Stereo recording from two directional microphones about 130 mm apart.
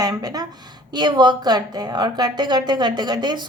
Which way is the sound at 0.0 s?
30° right (ahead or behind).